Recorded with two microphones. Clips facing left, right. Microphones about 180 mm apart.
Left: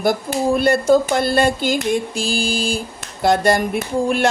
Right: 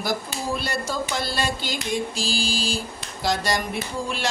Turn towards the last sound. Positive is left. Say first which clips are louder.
# left 10 dB
turn(degrees=55)  # may be behind; listen again after turning